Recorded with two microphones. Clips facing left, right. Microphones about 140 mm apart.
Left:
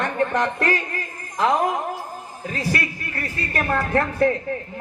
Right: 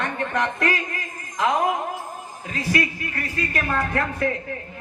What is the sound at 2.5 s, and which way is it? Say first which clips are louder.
A man's voice: right 2 dB; 35° left (ahead or behind).